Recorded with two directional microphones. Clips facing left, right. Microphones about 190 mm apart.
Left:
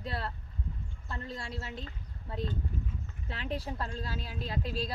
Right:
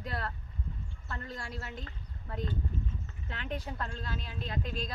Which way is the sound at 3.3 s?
35° left (ahead or behind).